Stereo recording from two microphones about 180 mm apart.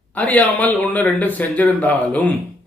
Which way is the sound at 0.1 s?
10° left (ahead or behind).